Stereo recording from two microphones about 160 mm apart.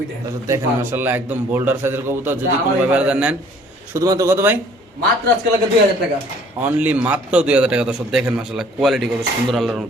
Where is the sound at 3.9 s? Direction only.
20° right (ahead or behind).